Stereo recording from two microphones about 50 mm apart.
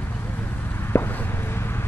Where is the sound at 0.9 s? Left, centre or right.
Left.